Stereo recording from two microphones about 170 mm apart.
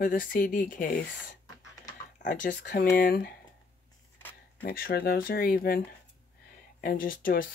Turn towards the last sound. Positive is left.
turn(degrees=55)  # may be behind; listen again after turning